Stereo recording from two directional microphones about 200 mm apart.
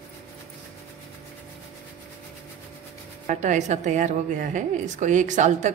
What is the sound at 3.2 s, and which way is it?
A woman's voice, 35° right (ahead or behind).